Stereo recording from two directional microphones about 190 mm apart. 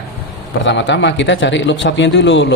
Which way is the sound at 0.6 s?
70° left (ahead or behind).